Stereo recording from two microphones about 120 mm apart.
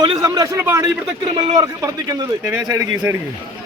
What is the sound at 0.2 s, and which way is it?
A man's voice, 25° right (ahead or behind).